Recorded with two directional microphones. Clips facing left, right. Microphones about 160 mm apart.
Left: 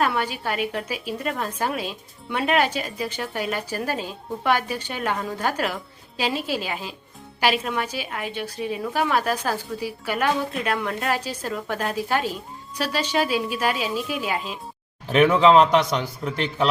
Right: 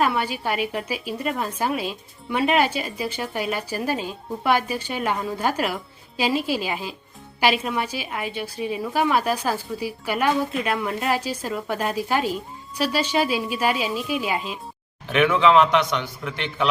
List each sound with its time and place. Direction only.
0.0 s speech: 10° right (ahead or behind)
15.1 s a man's voice: 35° left (ahead or behind)